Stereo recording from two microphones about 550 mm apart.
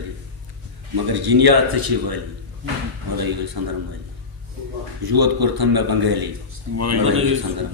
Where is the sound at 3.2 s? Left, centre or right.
Right.